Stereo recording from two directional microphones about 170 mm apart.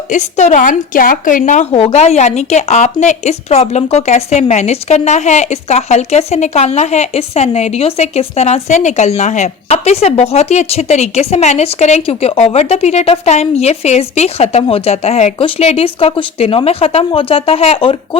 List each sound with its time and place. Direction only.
0.1 s a woman's voice: 45° left (ahead or behind)
1.7 s speech: 35° left (ahead or behind)